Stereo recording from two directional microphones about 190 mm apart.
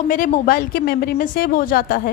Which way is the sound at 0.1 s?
45° left (ahead or behind).